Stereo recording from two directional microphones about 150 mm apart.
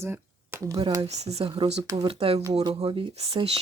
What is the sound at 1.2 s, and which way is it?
Speech, 40° right (ahead or behind).